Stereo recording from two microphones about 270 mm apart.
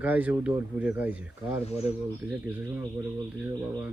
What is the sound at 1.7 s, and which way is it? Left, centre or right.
Speech, left.